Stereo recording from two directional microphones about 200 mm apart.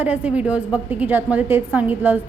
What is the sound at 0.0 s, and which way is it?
A woman's voice, 10° right (ahead or behind).